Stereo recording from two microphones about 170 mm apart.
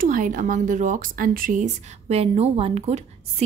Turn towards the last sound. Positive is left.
turn(degrees=-35)  # may be behind; listen again after turning